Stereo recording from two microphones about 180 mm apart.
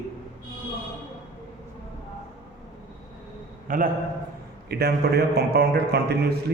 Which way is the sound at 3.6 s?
50° right (ahead or behind).